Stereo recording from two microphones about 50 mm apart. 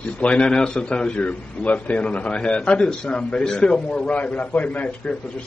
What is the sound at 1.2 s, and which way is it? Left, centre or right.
A man's voice, left.